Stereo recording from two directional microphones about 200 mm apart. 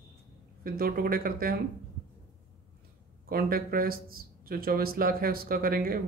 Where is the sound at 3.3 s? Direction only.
50° right (ahead or behind).